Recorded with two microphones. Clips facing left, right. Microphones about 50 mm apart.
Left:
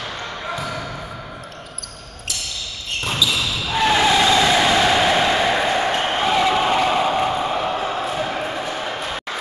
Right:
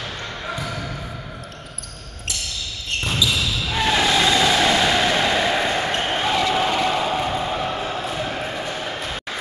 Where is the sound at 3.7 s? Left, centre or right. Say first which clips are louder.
Left 3 dB; centre.